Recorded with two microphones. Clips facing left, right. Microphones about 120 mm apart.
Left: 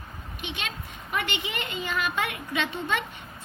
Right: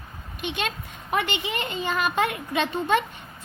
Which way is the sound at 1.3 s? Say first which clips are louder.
Right 4 dB; 30° right (ahead or behind).